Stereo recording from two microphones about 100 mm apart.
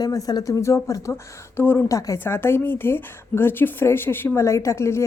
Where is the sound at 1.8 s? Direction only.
35° left (ahead or behind).